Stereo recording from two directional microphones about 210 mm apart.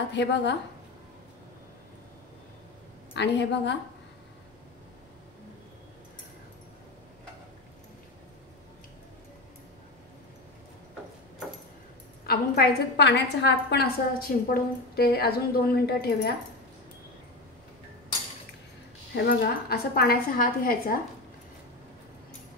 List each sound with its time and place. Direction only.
0.1 s a woman's voice: 55° left (ahead or behind)
3.2 s a woman's voice: 55° left (ahead or behind)
12.3 s a woman's voice: 50° left (ahead or behind)
19.1 s a woman's voice: 45° left (ahead or behind)